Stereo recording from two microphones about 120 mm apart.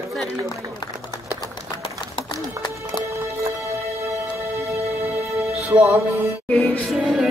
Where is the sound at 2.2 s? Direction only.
40° left (ahead or behind).